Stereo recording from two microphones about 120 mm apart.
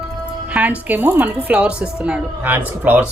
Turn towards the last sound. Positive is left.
turn(degrees=-15)  # may be behind; listen again after turning